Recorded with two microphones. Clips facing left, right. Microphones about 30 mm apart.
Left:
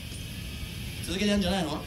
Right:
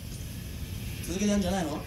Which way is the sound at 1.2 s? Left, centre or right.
Left.